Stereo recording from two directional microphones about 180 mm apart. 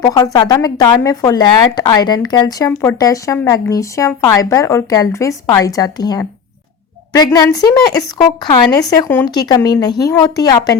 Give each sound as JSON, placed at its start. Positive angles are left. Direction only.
{"t": 0.0, "sound": "speech", "side_deg": 20}